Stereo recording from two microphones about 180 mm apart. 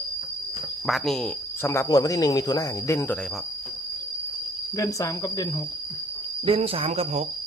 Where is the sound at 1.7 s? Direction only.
20° left (ahead or behind).